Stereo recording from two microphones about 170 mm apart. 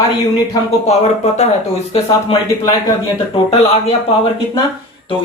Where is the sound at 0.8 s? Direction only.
40° left (ahead or behind).